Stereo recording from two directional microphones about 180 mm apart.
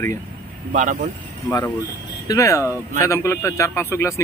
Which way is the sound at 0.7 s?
45° right (ahead or behind).